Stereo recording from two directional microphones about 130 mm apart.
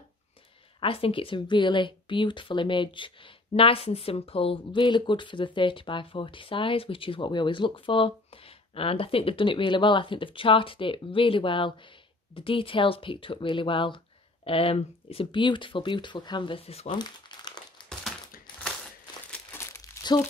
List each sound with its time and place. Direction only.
0.7 s speech: 45° left (ahead or behind)
17.0 s crumpling: 35° left (ahead or behind)
19.5 s crumpling: 20° left (ahead or behind)